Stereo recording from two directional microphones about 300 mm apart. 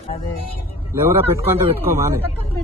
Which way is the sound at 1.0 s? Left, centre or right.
Centre.